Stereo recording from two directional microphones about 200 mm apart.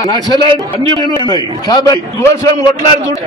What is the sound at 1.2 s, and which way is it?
A man's voice, 20° left (ahead or behind).